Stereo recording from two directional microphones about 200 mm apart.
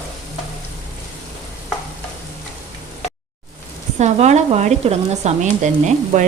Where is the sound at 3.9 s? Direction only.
35° right (ahead or behind).